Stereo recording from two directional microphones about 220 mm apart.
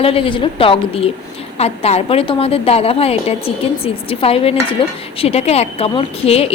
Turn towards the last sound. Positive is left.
turn(degrees=25)  # may be behind; listen again after turning